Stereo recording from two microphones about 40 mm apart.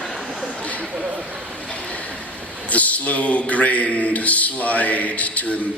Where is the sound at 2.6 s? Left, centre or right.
Left.